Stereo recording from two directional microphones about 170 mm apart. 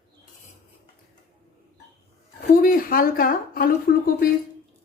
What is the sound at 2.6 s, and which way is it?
A woman's voice, 55° left (ahead or behind).